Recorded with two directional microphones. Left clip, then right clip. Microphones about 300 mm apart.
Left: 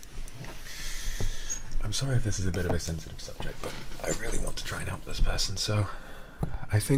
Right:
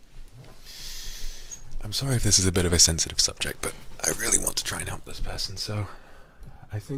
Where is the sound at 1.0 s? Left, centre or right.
Centre.